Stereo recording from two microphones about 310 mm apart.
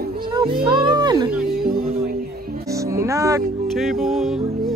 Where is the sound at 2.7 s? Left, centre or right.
Centre.